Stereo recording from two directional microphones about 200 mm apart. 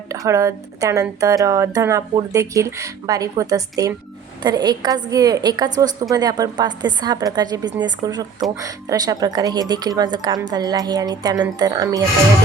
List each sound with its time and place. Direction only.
0.1 s a woman's voice: 15° right (ahead or behind)